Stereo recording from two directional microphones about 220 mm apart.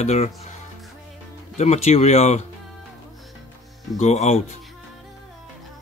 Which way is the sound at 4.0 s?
30° left (ahead or behind).